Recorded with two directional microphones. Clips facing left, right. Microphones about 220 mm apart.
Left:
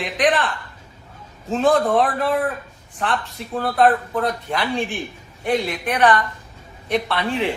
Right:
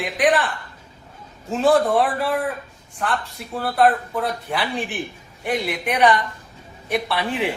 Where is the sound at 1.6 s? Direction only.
Centre (ahead or behind).